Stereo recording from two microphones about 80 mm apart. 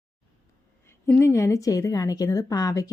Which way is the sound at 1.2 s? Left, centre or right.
Left.